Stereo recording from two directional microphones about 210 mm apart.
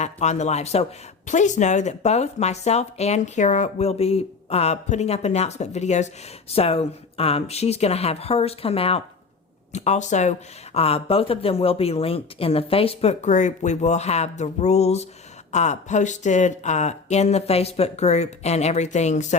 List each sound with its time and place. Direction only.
0.0 s speech: 35° left (ahead or behind)